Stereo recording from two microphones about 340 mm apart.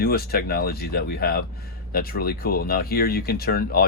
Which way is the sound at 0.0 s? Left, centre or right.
Left.